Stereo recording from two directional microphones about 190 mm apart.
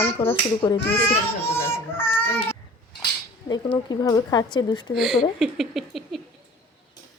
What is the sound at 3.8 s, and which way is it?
Speech, 20° left (ahead or behind).